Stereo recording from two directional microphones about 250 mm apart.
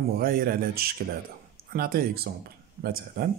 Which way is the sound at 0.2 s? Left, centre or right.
Right.